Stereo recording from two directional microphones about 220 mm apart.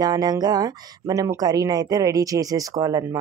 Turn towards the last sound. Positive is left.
turn(degrees=-15)  # may be behind; listen again after turning